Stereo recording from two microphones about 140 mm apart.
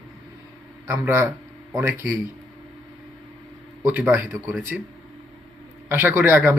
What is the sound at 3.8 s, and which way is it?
Speech, 10° right (ahead or behind).